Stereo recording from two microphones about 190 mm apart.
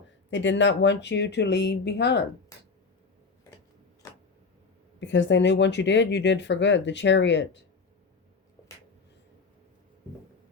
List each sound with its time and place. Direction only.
0.3 s speech: 70° left (ahead or behind)
4.9 s speech: 70° left (ahead or behind)